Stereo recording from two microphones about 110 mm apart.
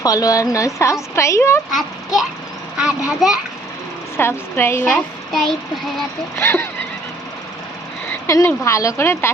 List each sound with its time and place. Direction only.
0.0 s a woman's voice: 35° left (ahead or behind)
2.7 s a child's voice: 5° right (ahead or behind)
4.2 s a woman's voice: 20° left (ahead or behind)
5.3 s a child's voice: 5° left (ahead or behind)
6.3 s a woman's voice: 20° left (ahead or behind)
8.3 s a woman's voice: 25° left (ahead or behind)